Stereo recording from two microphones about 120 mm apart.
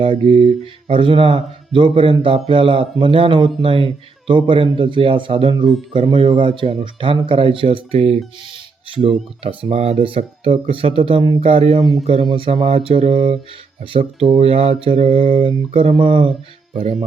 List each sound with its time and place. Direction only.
0.0 s speech: 50° right (ahead or behind)
8.4 s a sound: 50° right (ahead or behind)
9.4 s speech: 50° right (ahead or behind)